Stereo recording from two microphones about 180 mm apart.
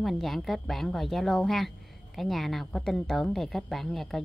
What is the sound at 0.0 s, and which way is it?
A woman's voice, centre (ahead or behind).